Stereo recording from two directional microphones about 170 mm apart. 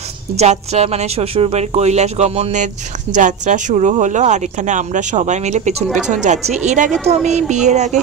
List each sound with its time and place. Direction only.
0.4 s speech: 40° right (ahead or behind)